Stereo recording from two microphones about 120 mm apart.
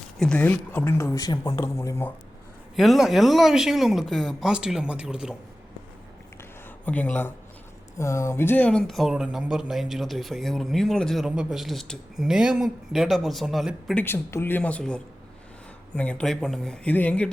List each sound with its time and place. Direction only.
0.2 s speech: 10° left (ahead or behind)
2.7 s speech: centre (ahead or behind)
6.8 s speech: 15° left (ahead or behind)
8.9 s speech: centre (ahead or behind)
11.3 s speech: 10° right (ahead or behind)
13.9 s speech: 20° left (ahead or behind)